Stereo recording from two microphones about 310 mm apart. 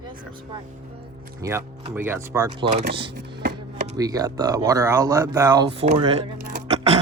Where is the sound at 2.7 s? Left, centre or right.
Right.